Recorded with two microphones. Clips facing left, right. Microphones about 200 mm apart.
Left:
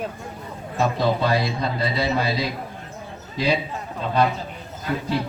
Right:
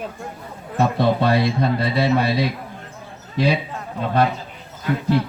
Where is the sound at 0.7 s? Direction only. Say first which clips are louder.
Right 3 dB; 60° right (ahead or behind).